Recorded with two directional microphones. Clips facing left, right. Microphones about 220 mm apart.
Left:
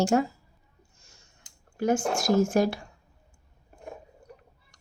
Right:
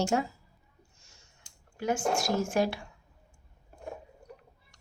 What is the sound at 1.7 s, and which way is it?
Speech, 45° left (ahead or behind).